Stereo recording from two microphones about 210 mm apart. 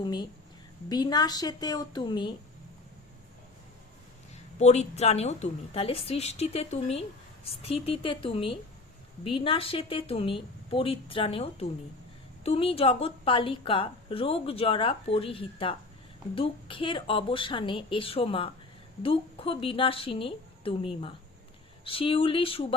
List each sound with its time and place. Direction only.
0.0 s a woman's voice: 20° left (ahead or behind)
4.6 s a woman's voice: 30° left (ahead or behind)